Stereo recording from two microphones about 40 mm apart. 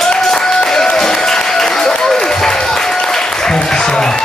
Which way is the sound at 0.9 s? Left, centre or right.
Centre.